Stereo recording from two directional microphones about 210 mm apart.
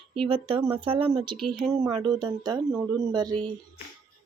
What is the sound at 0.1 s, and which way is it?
Speech, 25° right (ahead or behind).